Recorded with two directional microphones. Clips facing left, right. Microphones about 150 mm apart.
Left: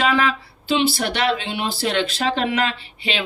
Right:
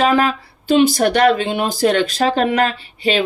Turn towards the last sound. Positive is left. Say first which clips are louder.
# right 8 dB
turn(degrees=-40)  # may be behind; listen again after turning